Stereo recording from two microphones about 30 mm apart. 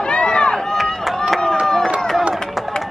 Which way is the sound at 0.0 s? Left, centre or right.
Left.